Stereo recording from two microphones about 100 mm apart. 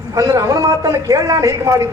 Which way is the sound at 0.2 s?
35° right (ahead or behind).